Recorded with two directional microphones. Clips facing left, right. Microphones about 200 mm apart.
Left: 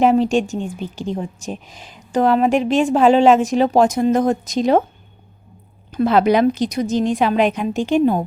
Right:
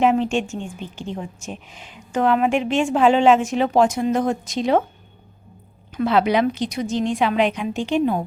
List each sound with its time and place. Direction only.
0.0 s a woman's voice: 35° left (ahead or behind)
5.9 s a woman's voice: 40° left (ahead or behind)